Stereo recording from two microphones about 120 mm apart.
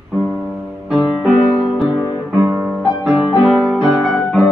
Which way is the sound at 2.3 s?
20° right (ahead or behind).